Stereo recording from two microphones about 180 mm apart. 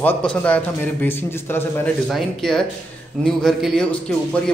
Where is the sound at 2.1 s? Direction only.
Centre (ahead or behind).